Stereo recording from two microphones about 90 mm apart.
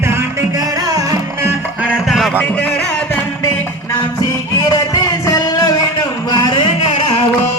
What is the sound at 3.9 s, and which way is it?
Music, 55° left (ahead or behind).